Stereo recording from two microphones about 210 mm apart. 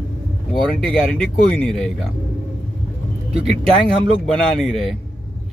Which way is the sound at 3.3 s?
25° right (ahead or behind).